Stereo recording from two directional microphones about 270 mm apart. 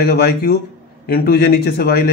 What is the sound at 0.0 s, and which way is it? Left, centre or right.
A man's voice, left.